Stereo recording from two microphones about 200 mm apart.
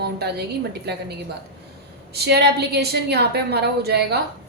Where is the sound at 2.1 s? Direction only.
55° right (ahead or behind).